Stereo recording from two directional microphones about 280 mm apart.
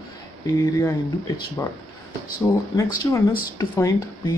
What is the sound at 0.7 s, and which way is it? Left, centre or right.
Speech, centre.